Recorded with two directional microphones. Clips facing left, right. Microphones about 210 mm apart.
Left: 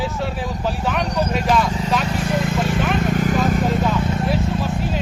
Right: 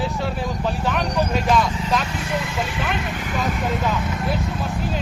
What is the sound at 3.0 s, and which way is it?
Vehicle, 40° left (ahead or behind).